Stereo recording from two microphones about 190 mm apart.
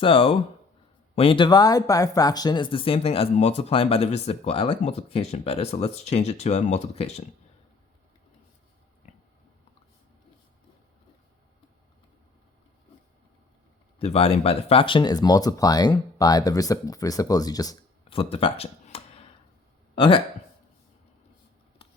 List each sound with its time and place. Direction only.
0.0 s speech: 30° left (ahead or behind)
14.0 s speech: 30° left (ahead or behind)